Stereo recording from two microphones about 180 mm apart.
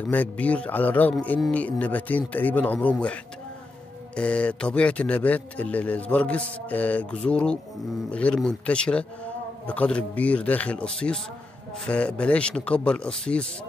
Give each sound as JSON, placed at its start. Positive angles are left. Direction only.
{"t": 0.1, "sound": "a man's voice", "side_deg": 10}